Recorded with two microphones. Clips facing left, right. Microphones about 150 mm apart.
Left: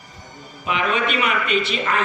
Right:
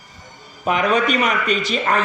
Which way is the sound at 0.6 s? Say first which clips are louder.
Right 4 dB; 40° right (ahead or behind).